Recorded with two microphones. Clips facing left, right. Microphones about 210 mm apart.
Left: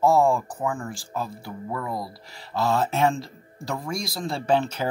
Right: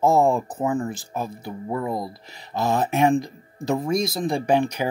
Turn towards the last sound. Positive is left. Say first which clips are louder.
# right 2 dB
turn(degrees=-15)  # may be behind; listen again after turning